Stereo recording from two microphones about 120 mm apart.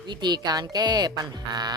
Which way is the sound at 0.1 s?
35° right (ahead or behind).